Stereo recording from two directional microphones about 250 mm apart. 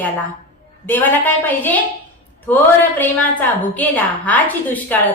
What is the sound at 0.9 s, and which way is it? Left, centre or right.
A woman's voice, centre.